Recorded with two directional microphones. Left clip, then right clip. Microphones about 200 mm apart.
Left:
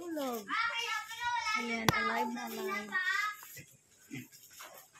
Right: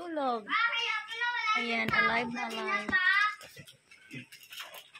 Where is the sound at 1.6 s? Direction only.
5° right (ahead or behind).